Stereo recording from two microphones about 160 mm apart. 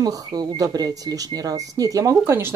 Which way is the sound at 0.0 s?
25° right (ahead or behind).